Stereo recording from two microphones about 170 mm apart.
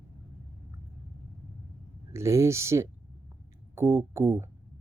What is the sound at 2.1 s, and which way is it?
Speech, 15° right (ahead or behind).